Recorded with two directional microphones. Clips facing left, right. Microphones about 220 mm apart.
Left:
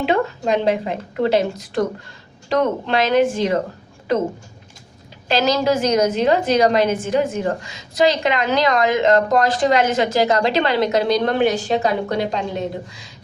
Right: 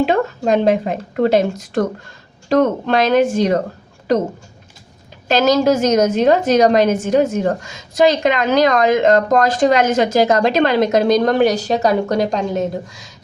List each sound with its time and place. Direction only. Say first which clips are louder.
0.0 s a woman's voice: right 3 dB; 45° right (ahead or behind)
5.3 s a woman's voice: right 4 dB; 45° right (ahead or behind)